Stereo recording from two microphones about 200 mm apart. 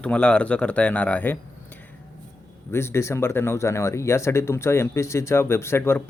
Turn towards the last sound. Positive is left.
turn(degrees=10)  # may be behind; listen again after turning